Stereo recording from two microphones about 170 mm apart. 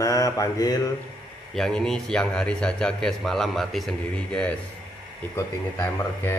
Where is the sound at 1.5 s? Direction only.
5° left (ahead or behind).